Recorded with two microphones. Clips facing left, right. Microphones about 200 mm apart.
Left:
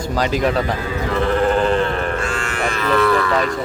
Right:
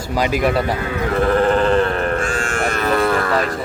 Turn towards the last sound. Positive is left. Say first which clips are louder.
# left 1 dB
turn(degrees=-45)  # may be behind; listen again after turning